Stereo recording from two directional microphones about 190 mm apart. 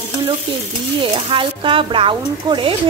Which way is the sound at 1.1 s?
25° right (ahead or behind).